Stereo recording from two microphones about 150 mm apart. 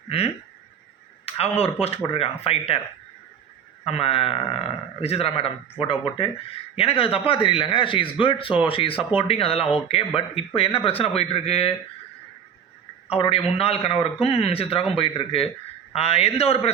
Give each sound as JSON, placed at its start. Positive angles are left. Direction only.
{"t": 1.2, "sound": "a man's voice", "side_deg": 40}
{"t": 3.8, "sound": "a man's voice", "side_deg": 40}
{"t": 13.1, "sound": "a man's voice", "side_deg": 40}